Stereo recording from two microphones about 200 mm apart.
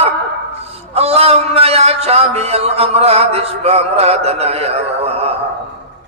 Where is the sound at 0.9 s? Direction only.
30° right (ahead or behind).